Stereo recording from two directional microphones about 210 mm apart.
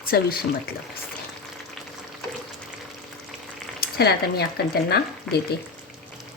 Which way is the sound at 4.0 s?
50° left (ahead or behind).